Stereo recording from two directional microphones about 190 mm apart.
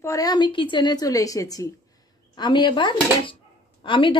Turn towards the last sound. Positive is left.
turn(degrees=25)  # may be behind; listen again after turning